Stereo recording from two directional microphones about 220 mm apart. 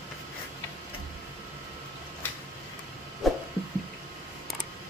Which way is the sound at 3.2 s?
Centre (ahead or behind).